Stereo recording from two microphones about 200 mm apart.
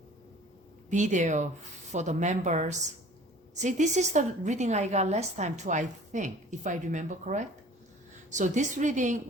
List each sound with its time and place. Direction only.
0.9 s a woman's voice: 40° right (ahead or behind)